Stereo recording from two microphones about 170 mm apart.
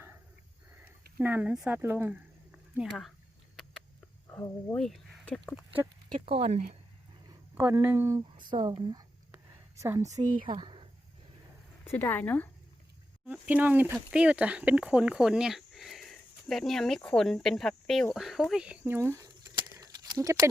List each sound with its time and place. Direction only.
1.2 s speech: 10° right (ahead or behind)
4.3 s cricket: 20° left (ahead or behind)
4.7 s speech: 5° left (ahead or behind)
5.5 s speech: 10° right (ahead or behind)
6.2 s speech: 35° right (ahead or behind)
7.5 s speech: 15° right (ahead or behind)
9.3 s a sound: 15° right (ahead or behind)
10.4 s speech: 30° right (ahead or behind)
11.9 s speech: 10° left (ahead or behind)
13.2 s speech: 5° right (ahead or behind)